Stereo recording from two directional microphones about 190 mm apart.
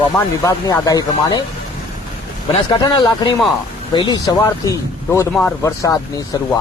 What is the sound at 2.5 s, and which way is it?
Speech, 20° left (ahead or behind).